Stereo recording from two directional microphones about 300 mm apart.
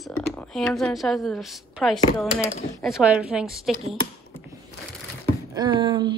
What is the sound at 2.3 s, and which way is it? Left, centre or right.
Speech, left.